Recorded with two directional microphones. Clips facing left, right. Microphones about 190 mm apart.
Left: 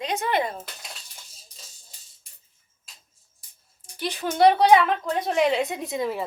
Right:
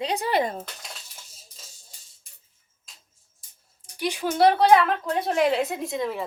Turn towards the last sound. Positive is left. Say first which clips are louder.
# even
turn(degrees=5)  # may be behind; listen again after turning